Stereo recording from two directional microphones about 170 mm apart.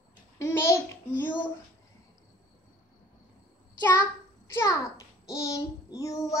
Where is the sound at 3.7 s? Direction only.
20° left (ahead or behind).